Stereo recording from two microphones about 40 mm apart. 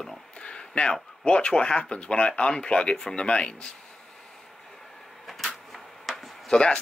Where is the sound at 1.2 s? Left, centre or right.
Left.